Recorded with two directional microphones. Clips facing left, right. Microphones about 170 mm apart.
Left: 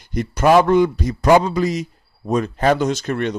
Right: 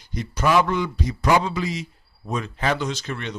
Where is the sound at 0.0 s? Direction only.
55° left (ahead or behind).